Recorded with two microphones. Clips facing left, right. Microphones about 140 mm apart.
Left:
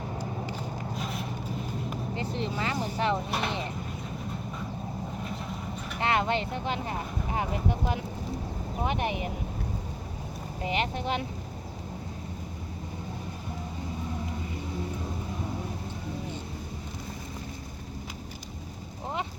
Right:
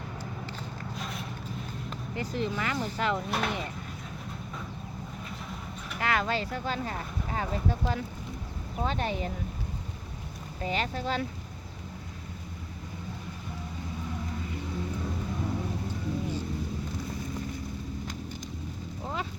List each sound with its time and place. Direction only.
0.9 s a sound: centre (ahead or behind)
2.3 s speech: 25° left (ahead or behind)
3.2 s speech: centre (ahead or behind)
6.0 s speech: 25° left (ahead or behind)
10.6 s speech: 20° left (ahead or behind)